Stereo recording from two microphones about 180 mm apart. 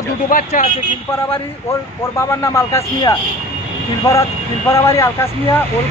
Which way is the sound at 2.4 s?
15° left (ahead or behind).